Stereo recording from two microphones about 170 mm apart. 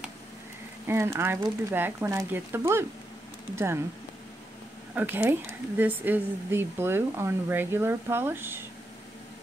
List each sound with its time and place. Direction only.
0.8 s speech: 15° right (ahead or behind)
4.9 s speech: 10° right (ahead or behind)